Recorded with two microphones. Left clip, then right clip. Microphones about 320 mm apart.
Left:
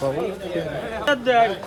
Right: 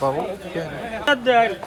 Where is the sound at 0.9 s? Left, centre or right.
Centre.